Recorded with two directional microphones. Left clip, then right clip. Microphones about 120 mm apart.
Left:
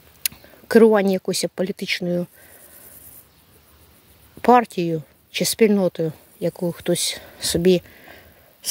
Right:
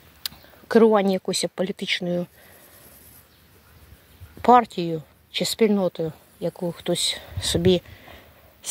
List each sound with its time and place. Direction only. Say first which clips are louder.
0.2 s speech: left 4 dB; 70° left (ahead or behind); by 2.2 s 50° left (ahead or behind)
4.4 s speech: left 1 dB; 60° left (ahead or behind); by 6.5 s 85° left
6.7 s speech: left 1 dB; 70° left (ahead or behind); by 8.3 s 40° left (ahead or behind)